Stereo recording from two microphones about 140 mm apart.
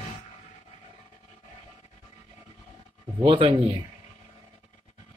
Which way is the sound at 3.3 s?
40° right (ahead or behind).